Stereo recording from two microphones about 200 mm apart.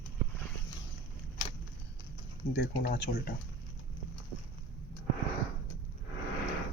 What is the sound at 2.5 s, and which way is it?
Speech, 60° left (ahead or behind).